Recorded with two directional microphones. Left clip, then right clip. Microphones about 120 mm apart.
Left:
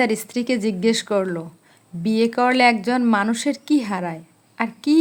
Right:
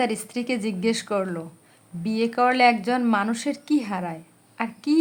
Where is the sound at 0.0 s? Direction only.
30° left (ahead or behind).